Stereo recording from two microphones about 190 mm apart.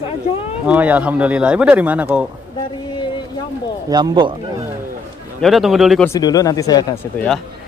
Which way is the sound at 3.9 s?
25° right (ahead or behind).